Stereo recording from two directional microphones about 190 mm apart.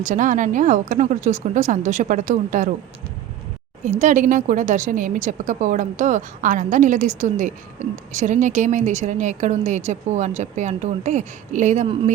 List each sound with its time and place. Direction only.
0.0 s a woman's voice: 40° right (ahead or behind)
3.8 s a woman's voice: 40° right (ahead or behind)